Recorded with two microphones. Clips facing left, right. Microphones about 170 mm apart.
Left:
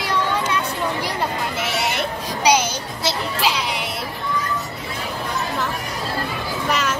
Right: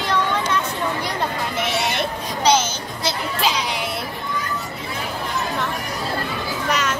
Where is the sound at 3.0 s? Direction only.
Centre (ahead or behind).